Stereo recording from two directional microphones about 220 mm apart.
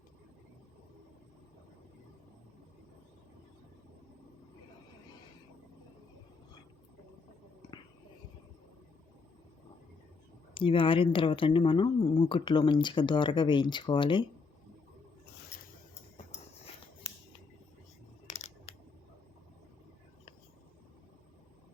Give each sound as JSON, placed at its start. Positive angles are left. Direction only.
{"t": 10.5, "sound": "speech", "side_deg": 25}
{"t": 18.3, "sound": "coin", "side_deg": 30}